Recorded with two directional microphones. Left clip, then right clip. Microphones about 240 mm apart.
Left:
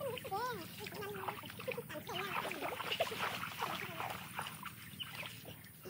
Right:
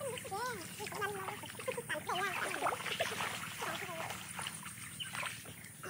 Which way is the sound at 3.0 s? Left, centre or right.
Left.